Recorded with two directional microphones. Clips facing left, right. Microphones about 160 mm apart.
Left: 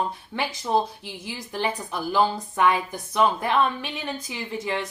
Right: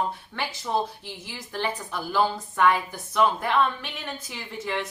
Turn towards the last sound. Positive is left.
turn(degrees=15)  # may be behind; listen again after turning